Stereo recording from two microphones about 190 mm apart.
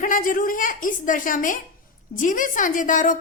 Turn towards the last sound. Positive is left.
turn(degrees=45)  # may be behind; listen again after turning